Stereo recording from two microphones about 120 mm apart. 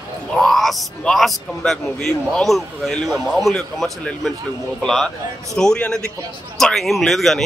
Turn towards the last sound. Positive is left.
turn(degrees=0)  # may be behind; listen again after turning